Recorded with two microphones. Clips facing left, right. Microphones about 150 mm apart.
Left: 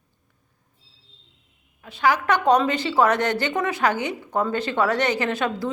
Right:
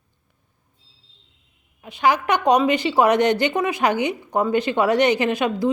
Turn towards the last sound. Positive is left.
turn(degrees=-15)  # may be behind; listen again after turning